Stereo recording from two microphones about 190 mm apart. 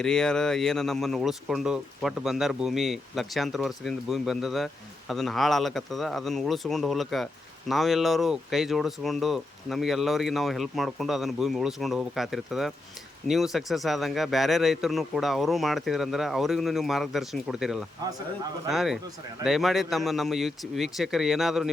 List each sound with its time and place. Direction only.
0.0 s speech: 5° left (ahead or behind)